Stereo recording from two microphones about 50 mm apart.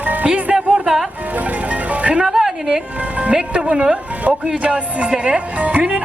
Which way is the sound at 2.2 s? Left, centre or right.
Centre.